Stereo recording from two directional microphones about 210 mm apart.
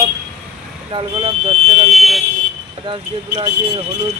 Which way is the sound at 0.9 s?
25° right (ahead or behind).